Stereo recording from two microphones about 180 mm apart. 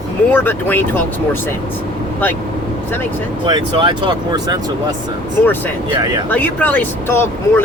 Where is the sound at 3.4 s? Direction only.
25° right (ahead or behind).